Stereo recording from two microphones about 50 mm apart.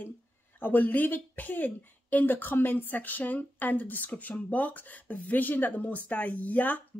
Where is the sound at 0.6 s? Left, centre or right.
Left.